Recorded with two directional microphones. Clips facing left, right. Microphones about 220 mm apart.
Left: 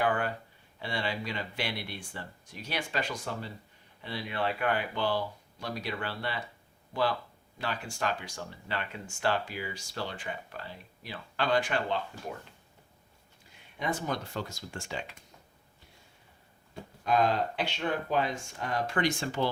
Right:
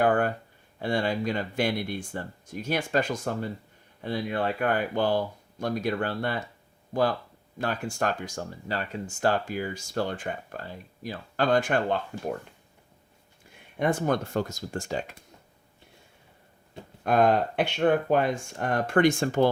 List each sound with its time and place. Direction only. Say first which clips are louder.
0.0 s a sound: right 6 dB; 45° right (ahead or behind)
0.8 s speech: right 8 dB; 45° right (ahead or behind)
13.7 s speech: right 8 dB; 55° right (ahead or behind)
17.0 s speech: right 5 dB; 55° right (ahead or behind)